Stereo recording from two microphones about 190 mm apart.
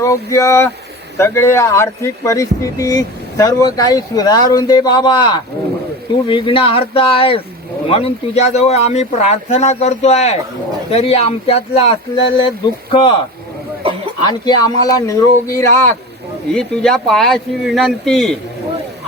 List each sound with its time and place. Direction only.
0.0 s speech: 15° left (ahead or behind)
14.3 s speech: 20° left (ahead or behind)
16.5 s speech: 5° left (ahead or behind)